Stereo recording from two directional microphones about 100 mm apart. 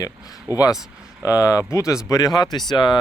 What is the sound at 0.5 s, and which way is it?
Speech, 40° left (ahead or behind).